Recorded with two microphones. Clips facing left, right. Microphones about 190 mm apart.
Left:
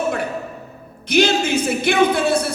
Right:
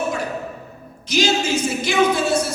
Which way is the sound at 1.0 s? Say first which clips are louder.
Left 3 dB; 60° left (ahead or behind).